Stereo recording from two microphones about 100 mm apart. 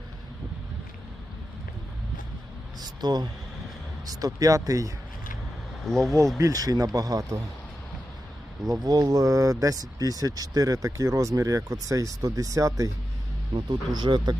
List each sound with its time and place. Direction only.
2.8 s speech: 45° right (ahead or behind)
5.8 s speech: 5° left (ahead or behind)
6.4 s speech: 35° right (ahead or behind)
8.7 s speech: 40° right (ahead or behind)
13.5 s speech: 50° right (ahead or behind)